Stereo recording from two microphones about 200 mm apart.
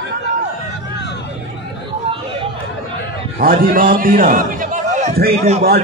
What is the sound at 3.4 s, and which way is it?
A man's voice, 45° right (ahead or behind).